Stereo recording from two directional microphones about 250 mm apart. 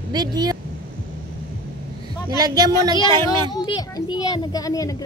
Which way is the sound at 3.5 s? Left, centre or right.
Centre.